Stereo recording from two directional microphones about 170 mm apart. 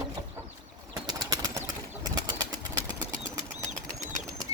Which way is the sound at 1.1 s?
25° right (ahead or behind).